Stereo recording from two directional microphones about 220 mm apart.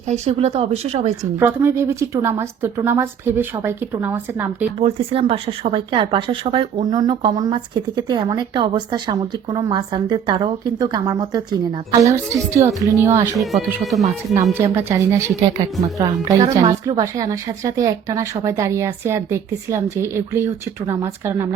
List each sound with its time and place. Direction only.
0.1 s speech: 30° right (ahead or behind)
1.2 s a woman's voice: 10° right (ahead or behind)
4.8 s speech: 25° right (ahead or behind)
13.4 s speech: centre (ahead or behind)
14.6 s a woman's voice: 10° right (ahead or behind)